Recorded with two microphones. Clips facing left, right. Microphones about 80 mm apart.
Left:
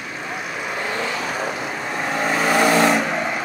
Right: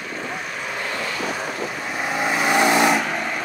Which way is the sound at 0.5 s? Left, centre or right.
Centre.